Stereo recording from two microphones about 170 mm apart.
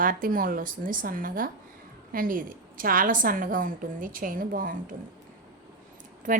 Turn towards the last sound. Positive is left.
turn(degrees=-50)  # may be behind; listen again after turning